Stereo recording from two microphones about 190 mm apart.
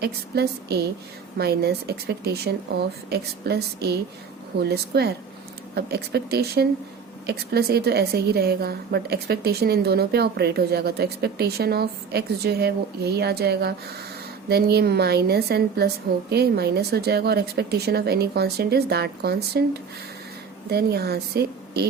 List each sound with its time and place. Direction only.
0.0 s a woman's voice: 60° right (ahead or behind)
20.7 s a woman's voice: 55° right (ahead or behind)